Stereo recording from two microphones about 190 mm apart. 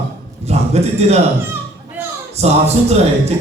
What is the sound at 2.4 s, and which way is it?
Speech, 35° right (ahead or behind).